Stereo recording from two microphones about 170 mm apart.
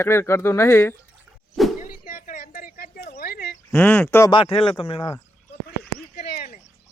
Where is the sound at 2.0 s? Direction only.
55° left (ahead or behind).